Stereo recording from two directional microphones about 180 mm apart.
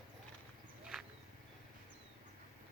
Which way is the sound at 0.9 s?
5° right (ahead or behind).